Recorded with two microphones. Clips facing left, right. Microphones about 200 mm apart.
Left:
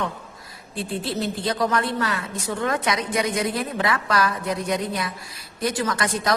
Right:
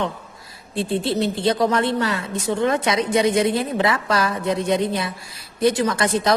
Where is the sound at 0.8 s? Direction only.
25° right (ahead or behind).